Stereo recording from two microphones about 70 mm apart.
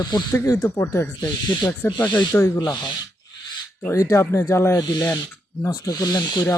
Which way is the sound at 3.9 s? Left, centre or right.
Left.